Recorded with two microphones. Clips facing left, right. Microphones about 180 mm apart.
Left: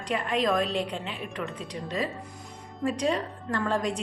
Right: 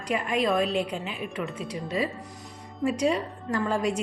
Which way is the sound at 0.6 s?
35° left (ahead or behind).